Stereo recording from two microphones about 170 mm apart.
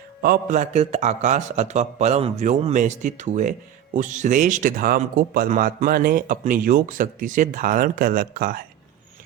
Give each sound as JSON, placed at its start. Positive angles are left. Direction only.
{"t": 0.2, "sound": "speech", "side_deg": -55}